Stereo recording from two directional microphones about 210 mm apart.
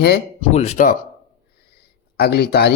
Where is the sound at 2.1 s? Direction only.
50° left (ahead or behind).